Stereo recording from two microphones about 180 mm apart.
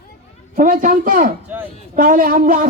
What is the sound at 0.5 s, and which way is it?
A man's voice, 50° right (ahead or behind).